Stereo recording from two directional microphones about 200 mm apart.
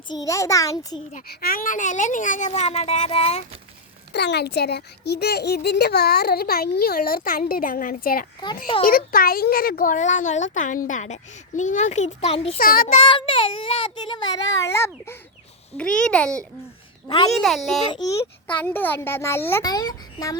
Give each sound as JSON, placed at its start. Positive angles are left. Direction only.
{"t": 0.1, "sound": "a child's voice", "side_deg": 15}
{"t": 1.1, "sound": "speech", "side_deg": 50}
{"t": 4.1, "sound": "a child's voice", "side_deg": 55}
{"t": 12.5, "sound": "a child's voice", "side_deg": 45}
{"t": 13.0, "sound": "a child's voice", "side_deg": 25}
{"t": 17.1, "sound": "a child's voice", "side_deg": 25}
{"t": 17.4, "sound": "a child's voice", "side_deg": 0}